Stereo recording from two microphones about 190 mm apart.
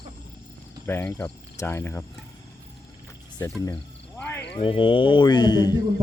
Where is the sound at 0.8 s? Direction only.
10° left (ahead or behind).